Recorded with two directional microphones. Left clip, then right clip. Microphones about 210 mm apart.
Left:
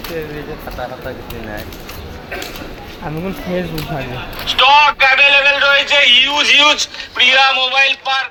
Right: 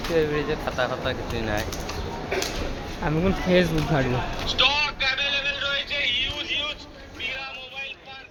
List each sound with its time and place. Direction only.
3.0 s speech: 10° right (ahead or behind)
4.4 s a man's voice: 45° left (ahead or behind)